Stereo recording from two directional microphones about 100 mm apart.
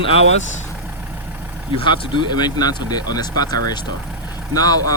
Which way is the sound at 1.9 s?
50° left (ahead or behind).